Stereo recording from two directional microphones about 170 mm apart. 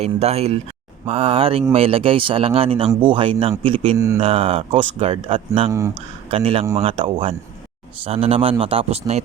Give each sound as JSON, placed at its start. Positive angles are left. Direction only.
{"t": 0.0, "sound": "speech", "side_deg": -40}
{"t": 3.9, "sound": "speech", "side_deg": -20}
{"t": 4.2, "sound": "speech", "side_deg": -35}